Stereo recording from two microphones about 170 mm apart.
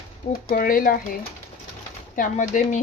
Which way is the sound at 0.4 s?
55° left (ahead or behind).